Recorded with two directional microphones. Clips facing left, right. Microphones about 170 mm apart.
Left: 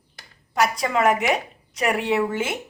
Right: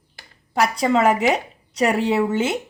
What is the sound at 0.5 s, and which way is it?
A woman's voice, 30° right (ahead or behind).